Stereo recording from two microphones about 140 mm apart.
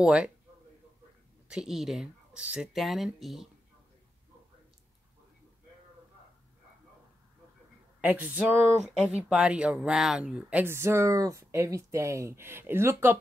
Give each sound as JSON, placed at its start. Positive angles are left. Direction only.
{"t": 0.0, "sound": "speech", "side_deg": -5}
{"t": 1.5, "sound": "speech", "side_deg": -5}
{"t": 8.0, "sound": "speech", "side_deg": -10}